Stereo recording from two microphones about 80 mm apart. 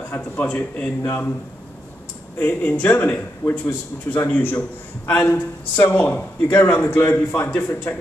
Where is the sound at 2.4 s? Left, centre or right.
Left.